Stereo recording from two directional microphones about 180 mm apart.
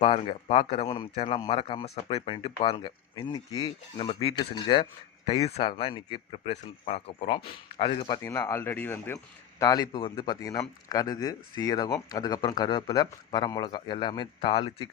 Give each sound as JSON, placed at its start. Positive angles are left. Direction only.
{"t": 0.0, "sound": "speech", "side_deg": 30}